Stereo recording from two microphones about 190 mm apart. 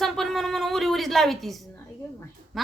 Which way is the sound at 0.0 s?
Centre (ahead or behind).